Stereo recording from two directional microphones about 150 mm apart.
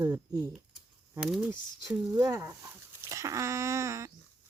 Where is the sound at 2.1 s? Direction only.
20° right (ahead or behind).